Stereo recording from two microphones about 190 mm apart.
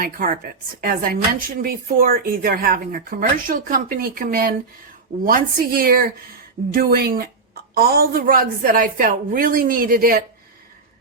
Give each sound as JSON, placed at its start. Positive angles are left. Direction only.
{"t": 0.0, "sound": "speech", "side_deg": -45}